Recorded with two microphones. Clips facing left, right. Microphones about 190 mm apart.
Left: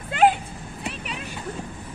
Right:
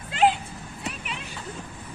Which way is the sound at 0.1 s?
50° left (ahead or behind).